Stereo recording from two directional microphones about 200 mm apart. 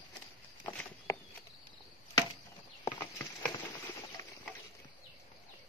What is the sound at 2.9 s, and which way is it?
Clip-clop, 15° left (ahead or behind).